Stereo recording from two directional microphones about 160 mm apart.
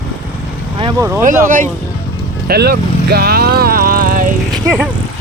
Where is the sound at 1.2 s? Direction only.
55° right (ahead or behind).